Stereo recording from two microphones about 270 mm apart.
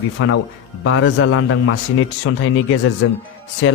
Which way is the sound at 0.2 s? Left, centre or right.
Left.